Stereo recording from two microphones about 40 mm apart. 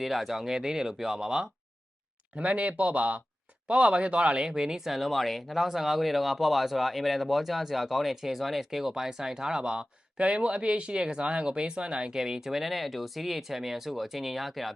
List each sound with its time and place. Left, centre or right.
0.0 s speech: centre
2.4 s speech: right
4.4 s speech: centre